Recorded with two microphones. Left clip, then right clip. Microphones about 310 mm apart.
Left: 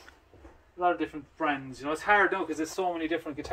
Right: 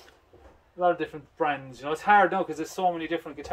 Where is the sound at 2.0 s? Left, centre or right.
Right.